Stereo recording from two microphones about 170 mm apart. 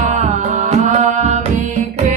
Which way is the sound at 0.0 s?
45° right (ahead or behind).